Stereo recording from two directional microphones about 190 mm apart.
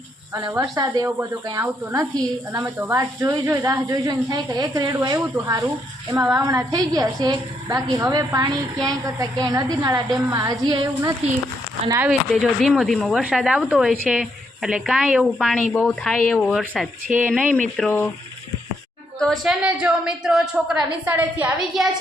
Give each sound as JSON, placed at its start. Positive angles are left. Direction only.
{"t": 0.3, "sound": "a woman's voice", "side_deg": -15}
{"t": 12.3, "sound": "speech", "side_deg": 0}
{"t": 17.7, "sound": "speech", "side_deg": 10}
{"t": 19.2, "sound": "speech", "side_deg": 0}